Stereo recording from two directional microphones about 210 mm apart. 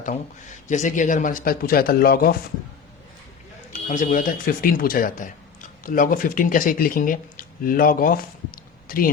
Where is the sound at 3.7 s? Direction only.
35° left (ahead or behind).